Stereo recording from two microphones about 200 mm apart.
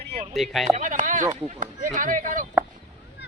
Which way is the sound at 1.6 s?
40° right (ahead or behind).